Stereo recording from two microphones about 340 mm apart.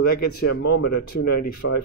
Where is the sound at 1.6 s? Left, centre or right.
Left.